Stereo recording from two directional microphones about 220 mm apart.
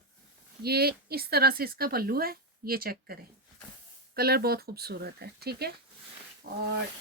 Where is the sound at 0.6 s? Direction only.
45° right (ahead or behind).